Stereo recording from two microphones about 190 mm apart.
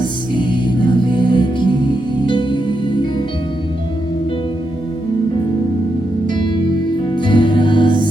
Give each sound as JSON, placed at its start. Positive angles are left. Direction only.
{"t": 0.3, "sound": "music", "side_deg": 25}
{"t": 7.1, "sound": "music", "side_deg": 25}